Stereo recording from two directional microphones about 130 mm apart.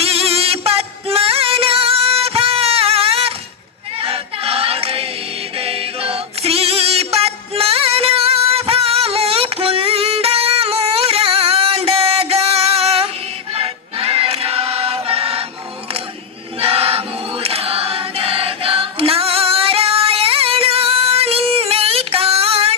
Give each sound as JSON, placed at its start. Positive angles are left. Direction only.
{"t": 0.0, "sound": "music", "side_deg": -50}
{"t": 3.9, "sound": "choir", "side_deg": -45}
{"t": 5.5, "sound": "music", "side_deg": -45}
{"t": 13.5, "sound": "choir", "side_deg": -45}
{"t": 16.6, "sound": "choir", "side_deg": -50}